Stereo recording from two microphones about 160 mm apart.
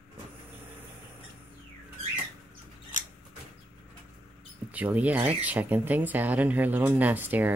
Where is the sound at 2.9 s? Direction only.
50° left (ahead or behind).